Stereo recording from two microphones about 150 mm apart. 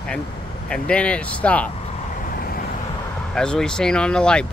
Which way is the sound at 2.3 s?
80° left.